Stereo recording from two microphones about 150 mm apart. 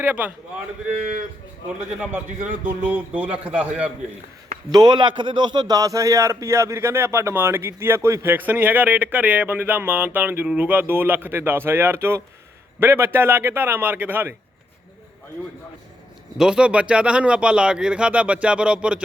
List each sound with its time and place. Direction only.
0.1 s a man's voice: 10° right (ahead or behind)
2.6 s a man's voice: 10° right (ahead or behind)
4.7 s a man's voice: 30° right (ahead or behind); by 14.3 s 15° right (ahead or behind)
16.4 s a man's voice: 5° right (ahead or behind)